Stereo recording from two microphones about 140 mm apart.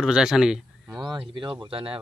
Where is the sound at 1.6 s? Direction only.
40° right (ahead or behind).